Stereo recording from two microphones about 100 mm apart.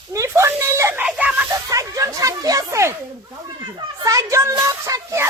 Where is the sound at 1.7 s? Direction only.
35° right (ahead or behind).